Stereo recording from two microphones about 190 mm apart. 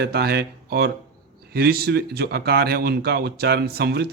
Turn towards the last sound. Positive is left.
turn(degrees=-55)  # may be behind; listen again after turning